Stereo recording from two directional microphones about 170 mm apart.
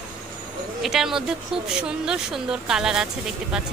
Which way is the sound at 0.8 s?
Centre (ahead or behind).